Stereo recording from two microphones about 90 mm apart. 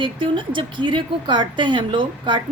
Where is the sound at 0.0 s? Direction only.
65° right (ahead or behind).